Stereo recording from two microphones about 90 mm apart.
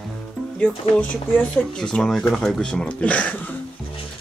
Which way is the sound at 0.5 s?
15° left (ahead or behind).